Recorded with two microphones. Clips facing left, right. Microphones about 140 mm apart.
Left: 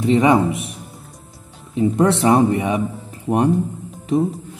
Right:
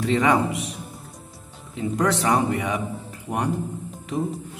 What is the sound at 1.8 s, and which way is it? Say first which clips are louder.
Speech: left 7 dB; 25° left (ahead or behind).